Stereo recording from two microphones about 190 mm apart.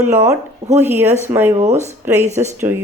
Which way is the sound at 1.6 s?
35° right (ahead or behind).